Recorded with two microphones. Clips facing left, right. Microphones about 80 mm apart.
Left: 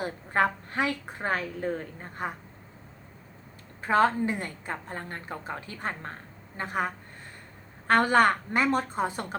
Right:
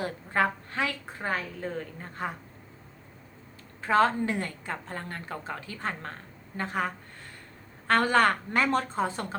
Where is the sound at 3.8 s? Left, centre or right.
Left.